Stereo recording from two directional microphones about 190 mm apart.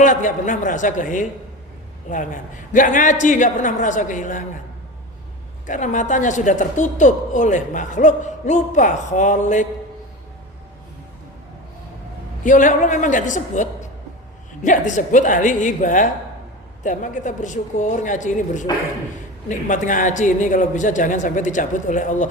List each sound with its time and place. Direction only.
0.0 s a man's voice: 40° left (ahead or behind)
5.6 s a woman's voice: 40° left (ahead or behind)
12.4 s a man's voice: 45° left (ahead or behind)